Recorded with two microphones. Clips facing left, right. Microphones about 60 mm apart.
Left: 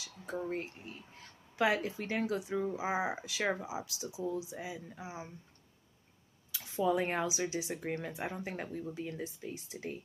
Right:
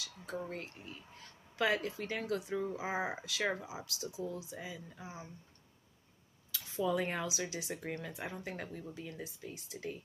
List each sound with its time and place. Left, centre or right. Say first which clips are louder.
0.5 s speech: left 5 dB; left
6.8 s speech: left 3 dB; left